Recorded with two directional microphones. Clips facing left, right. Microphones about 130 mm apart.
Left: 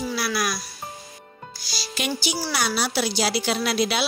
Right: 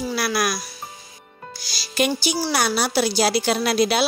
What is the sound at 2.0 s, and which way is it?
A woman's voice, 45° right (ahead or behind).